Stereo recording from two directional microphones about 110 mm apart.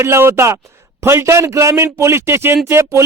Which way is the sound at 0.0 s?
25° right (ahead or behind).